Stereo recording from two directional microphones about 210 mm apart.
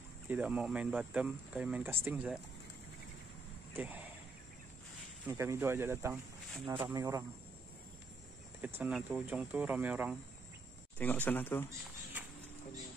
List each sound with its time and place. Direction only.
0.3 s speech: 5° right (ahead or behind)
3.7 s speech: 10° right (ahead or behind)
5.2 s speech: 15° right (ahead or behind)
8.5 s speech: 10° right (ahead or behind)
11.0 s speech: 10° left (ahead or behind)
12.2 s a sound: 10° right (ahead or behind)